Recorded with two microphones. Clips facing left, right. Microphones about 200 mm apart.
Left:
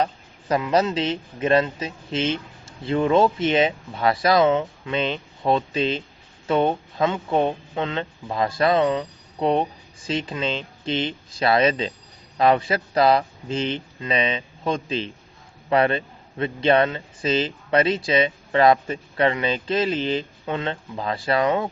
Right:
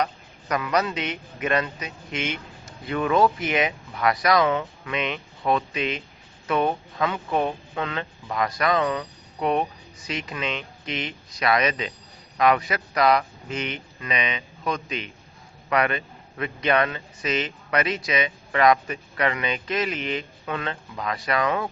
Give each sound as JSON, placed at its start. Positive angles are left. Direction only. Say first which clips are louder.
{"t": 0.0, "sound": "a man's voice", "louder": "left 2 dB", "side_deg": 25}